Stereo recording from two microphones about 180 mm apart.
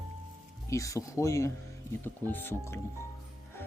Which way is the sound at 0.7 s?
15° left (ahead or behind).